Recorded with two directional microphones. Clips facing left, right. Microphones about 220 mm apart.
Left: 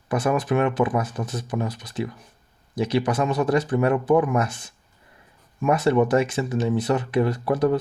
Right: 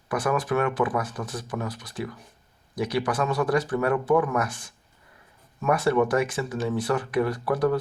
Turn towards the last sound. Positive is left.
turn(degrees=20)  # may be behind; listen again after turning